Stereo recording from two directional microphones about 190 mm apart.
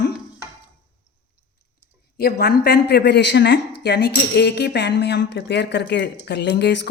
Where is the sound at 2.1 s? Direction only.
55° left (ahead or behind).